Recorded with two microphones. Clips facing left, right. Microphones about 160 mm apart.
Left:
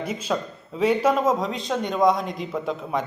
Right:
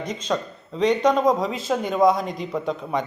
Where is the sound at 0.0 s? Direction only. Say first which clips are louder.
Even; 5° left (ahead or behind).